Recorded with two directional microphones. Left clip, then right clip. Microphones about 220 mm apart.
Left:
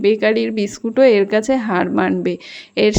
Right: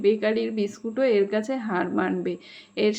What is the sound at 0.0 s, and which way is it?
Speech, 40° left (ahead or behind).